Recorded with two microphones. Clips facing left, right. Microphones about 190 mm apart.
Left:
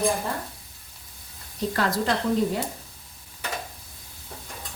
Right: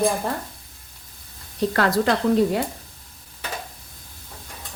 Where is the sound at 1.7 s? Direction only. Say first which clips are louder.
Right 4 dB; 70° right (ahead or behind).